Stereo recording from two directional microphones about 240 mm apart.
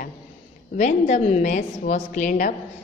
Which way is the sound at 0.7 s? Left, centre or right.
Left.